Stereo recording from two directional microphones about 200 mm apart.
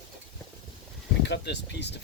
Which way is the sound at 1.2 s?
60° left (ahead or behind).